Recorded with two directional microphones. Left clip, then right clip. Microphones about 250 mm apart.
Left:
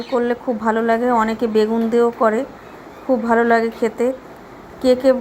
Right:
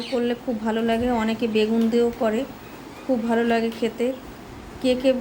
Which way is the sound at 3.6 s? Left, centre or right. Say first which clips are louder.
Left 5 dB; left.